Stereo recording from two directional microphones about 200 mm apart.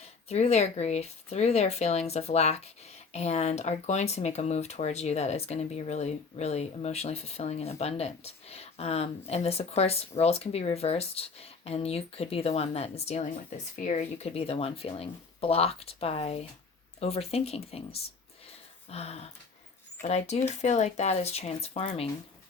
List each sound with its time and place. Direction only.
0.3 s speech: 35° left (ahead or behind)